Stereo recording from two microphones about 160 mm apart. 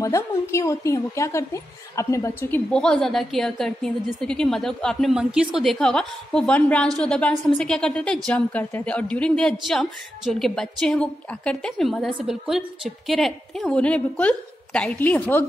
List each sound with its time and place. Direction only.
0.0 s a woman's voice: 20° left (ahead or behind)
2.7 s a woman's voice: 5° left (ahead or behind)